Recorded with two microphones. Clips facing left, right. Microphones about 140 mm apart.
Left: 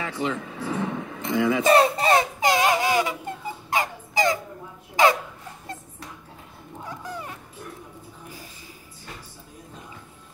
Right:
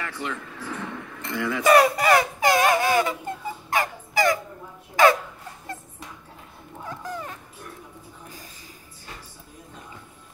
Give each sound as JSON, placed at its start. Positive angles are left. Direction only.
{"t": 0.0, "sound": "speech", "side_deg": 20}
{"t": 2.5, "sound": "a sound", "side_deg": -45}
{"t": 2.8, "sound": "synthetic singing", "side_deg": 15}
{"t": 3.7, "sound": "fowl", "side_deg": 20}
{"t": 5.0, "sound": "dog", "side_deg": 20}